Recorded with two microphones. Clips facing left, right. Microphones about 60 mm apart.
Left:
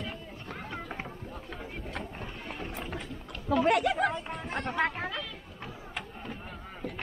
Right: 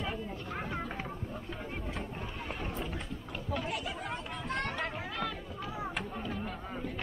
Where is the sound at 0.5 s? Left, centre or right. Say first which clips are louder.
Right 1 dB; centre.